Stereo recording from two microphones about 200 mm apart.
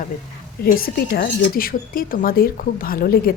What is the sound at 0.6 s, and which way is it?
A woman's voice, 50° left (ahead or behind).